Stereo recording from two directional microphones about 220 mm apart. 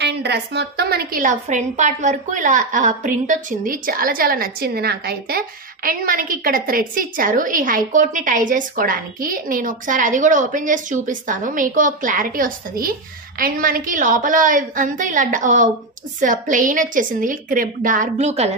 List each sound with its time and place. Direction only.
0.0 s a woman's voice: 50° right (ahead or behind); by 18.5 s 30° right (ahead or behind)